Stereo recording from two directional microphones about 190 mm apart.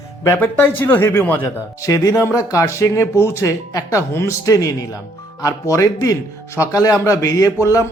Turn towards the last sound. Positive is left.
turn(degrees=15)  # may be behind; listen again after turning